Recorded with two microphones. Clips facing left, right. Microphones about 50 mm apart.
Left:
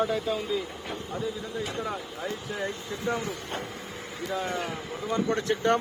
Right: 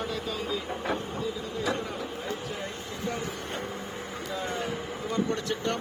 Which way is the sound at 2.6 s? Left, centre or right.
Left.